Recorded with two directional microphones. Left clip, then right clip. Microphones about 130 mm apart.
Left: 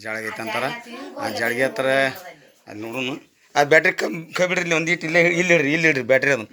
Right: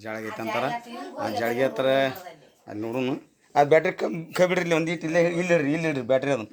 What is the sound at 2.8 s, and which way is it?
Speech, 55° right (ahead or behind).